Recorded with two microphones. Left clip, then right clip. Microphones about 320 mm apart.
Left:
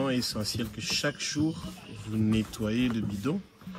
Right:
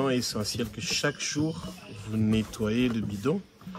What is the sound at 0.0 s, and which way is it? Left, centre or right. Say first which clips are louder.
Speech: right 2 dB; centre.